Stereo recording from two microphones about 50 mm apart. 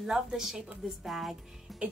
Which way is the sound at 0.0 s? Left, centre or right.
Centre.